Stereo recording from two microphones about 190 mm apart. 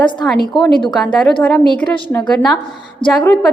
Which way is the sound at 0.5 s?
25° left (ahead or behind).